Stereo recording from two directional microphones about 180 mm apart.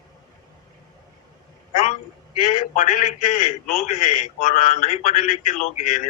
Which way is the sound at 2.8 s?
50° left (ahead or behind).